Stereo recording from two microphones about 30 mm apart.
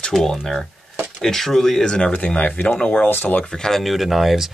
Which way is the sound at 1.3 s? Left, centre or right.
Centre.